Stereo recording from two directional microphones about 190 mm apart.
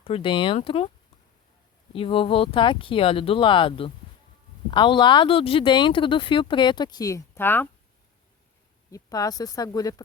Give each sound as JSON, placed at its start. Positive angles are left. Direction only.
{"t": 0.0, "sound": "speech", "side_deg": 30}
{"t": 1.9, "sound": "speech", "side_deg": 30}
{"t": 8.9, "sound": "speech", "side_deg": 20}